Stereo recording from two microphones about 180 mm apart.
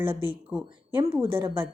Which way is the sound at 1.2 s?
25° right (ahead or behind).